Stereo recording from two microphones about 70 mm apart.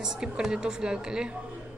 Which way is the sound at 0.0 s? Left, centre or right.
Centre.